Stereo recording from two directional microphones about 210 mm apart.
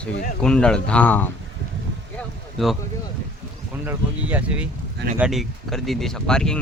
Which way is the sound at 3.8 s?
5° right (ahead or behind).